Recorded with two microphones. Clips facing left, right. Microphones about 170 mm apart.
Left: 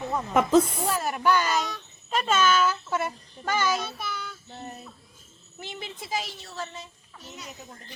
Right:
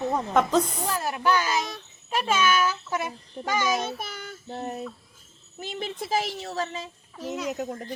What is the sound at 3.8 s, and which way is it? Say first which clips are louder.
Child singing: right 2 dB; 50° right (ahead or behind).